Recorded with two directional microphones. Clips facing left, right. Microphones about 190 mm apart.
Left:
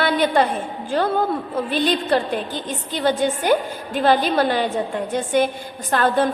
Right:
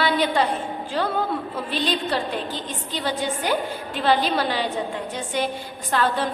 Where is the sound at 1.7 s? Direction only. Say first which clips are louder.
Left 5 dB; 50° left (ahead or behind).